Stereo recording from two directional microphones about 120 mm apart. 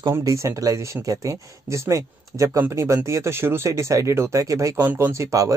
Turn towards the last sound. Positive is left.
turn(degrees=-25)  # may be behind; listen again after turning